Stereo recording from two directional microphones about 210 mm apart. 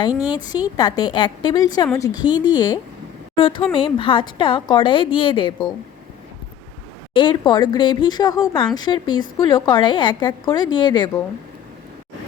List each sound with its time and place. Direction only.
0.3 s a woman's voice: 20° left (ahead or behind)
7.1 s a woman's voice: 20° left (ahead or behind)